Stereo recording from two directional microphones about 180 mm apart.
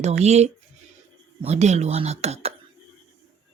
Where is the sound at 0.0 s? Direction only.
40° right (ahead or behind).